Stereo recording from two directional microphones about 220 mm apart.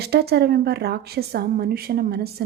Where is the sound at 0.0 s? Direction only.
45° right (ahead or behind).